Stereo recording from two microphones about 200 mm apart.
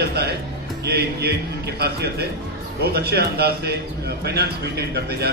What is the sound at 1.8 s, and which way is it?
A man's voice, 55° right (ahead or behind).